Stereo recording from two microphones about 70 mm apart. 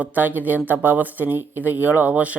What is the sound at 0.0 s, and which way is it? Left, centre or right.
Speech, right.